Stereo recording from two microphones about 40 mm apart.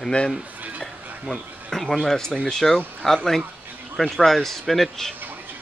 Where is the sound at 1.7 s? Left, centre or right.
Centre.